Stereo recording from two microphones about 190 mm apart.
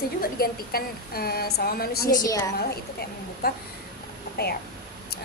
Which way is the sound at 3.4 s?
55° left (ahead or behind).